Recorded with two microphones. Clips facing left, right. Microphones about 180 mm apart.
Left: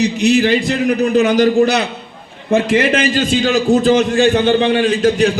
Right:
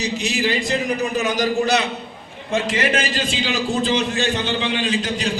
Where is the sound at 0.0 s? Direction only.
65° left (ahead or behind).